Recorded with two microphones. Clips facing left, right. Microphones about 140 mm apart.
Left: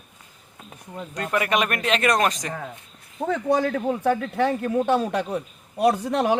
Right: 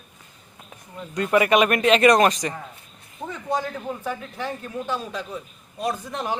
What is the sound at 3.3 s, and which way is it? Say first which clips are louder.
A man's voice: left 6 dB; 70° left (ahead or behind).